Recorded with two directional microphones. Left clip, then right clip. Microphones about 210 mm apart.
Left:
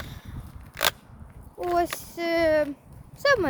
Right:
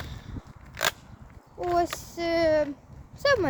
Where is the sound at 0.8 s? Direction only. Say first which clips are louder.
Left 2 dB; 30° left (ahead or behind).